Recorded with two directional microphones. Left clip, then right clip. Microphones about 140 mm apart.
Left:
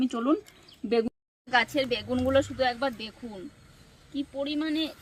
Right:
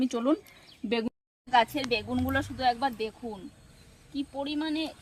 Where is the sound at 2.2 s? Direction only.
15° right (ahead or behind).